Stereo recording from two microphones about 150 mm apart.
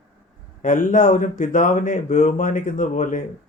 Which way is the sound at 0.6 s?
60° left (ahead or behind).